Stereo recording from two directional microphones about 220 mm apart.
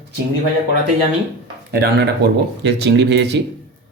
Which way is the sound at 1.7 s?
45° right (ahead or behind).